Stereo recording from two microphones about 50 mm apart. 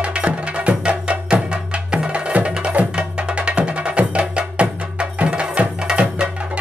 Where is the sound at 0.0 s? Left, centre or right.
Right.